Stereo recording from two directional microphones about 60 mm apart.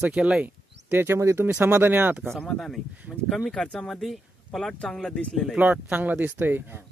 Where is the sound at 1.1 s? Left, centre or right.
Right.